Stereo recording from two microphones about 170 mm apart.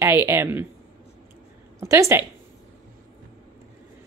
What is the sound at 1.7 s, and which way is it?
Speech, 15° right (ahead or behind).